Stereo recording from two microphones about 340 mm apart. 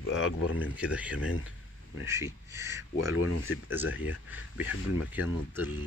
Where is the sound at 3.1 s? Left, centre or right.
Left.